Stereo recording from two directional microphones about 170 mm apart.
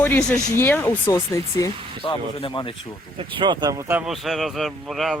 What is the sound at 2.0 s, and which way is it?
Speech, 30° left (ahead or behind).